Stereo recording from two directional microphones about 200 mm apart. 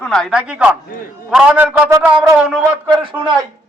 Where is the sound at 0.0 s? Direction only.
5° left (ahead or behind).